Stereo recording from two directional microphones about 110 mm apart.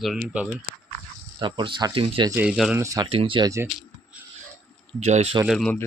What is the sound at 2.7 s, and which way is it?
Speech, 25° right (ahead or behind).